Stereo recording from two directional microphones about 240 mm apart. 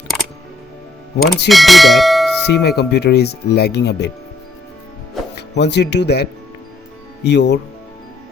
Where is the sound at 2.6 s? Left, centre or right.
Left.